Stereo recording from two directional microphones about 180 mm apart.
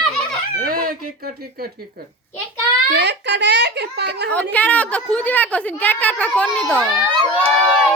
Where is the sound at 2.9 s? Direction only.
70° right (ahead or behind).